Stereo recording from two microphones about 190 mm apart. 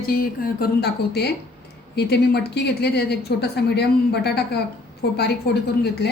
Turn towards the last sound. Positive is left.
turn(degrees=60)  # may be behind; listen again after turning